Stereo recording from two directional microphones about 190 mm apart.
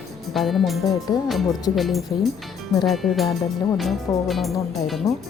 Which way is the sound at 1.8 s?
Centre (ahead or behind).